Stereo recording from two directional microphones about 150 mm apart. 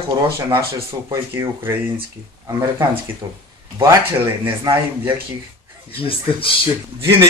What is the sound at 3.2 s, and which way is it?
Speech, 25° right (ahead or behind).